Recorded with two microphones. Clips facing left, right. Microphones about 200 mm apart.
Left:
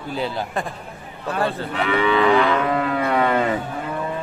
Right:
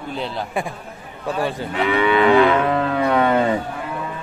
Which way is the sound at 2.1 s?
25° right (ahead or behind).